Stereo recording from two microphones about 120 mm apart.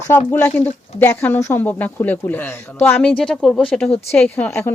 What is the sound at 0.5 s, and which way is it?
Speech, 75° left (ahead or behind).